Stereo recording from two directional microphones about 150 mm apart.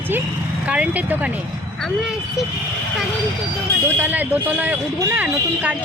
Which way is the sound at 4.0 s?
10° right (ahead or behind).